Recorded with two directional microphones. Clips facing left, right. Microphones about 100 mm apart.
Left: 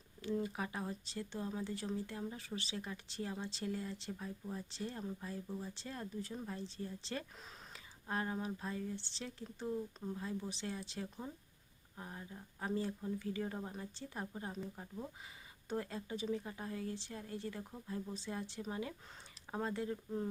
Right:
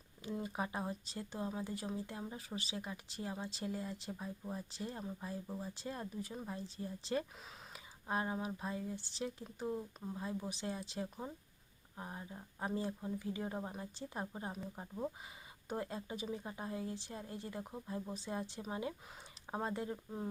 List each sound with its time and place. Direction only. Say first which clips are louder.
0.2 s speech: left 2 dB; 15° right (ahead or behind)